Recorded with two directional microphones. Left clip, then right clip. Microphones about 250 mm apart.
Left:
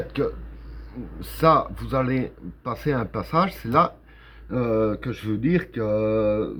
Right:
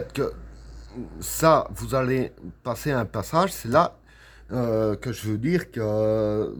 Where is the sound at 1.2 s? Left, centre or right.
Right.